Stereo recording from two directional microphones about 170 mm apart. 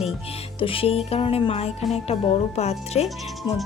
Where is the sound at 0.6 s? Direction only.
30° left (ahead or behind).